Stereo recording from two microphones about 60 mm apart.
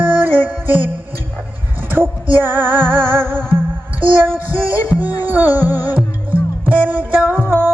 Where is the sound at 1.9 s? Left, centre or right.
Right.